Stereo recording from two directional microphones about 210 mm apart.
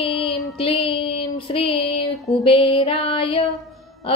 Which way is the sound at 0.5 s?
25° left (ahead or behind).